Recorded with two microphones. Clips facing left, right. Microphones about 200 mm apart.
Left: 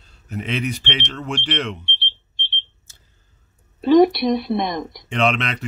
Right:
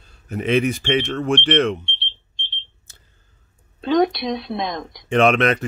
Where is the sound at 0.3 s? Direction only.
50° right (ahead or behind).